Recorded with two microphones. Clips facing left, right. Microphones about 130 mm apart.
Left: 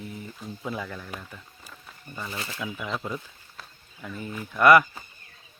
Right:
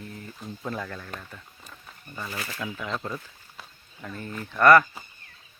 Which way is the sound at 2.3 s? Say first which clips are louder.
Right 1 dB; 25° left (ahead or behind).